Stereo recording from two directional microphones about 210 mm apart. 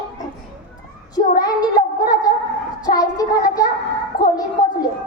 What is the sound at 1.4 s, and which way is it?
Child singing, 20° left (ahead or behind).